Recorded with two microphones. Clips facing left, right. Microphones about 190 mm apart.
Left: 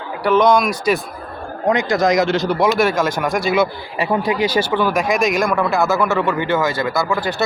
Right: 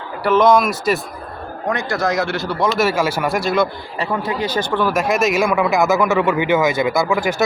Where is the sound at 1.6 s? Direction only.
20° left (ahead or behind).